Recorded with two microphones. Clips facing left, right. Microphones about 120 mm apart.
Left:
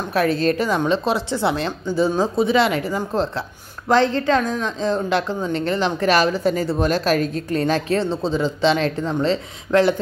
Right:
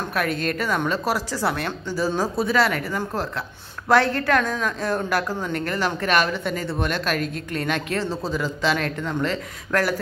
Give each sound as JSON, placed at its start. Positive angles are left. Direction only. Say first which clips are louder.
{"t": 0.1, "sound": "speech", "louder": "left 8 dB", "side_deg": 30}
{"t": 4.1, "sound": "a woman's voice", "louder": "left 2 dB", "side_deg": -65}
{"t": 4.6, "sound": "speech", "louder": "left 3 dB", "side_deg": 20}